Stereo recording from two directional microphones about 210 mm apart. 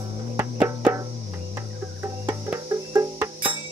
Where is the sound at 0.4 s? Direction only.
10° right (ahead or behind).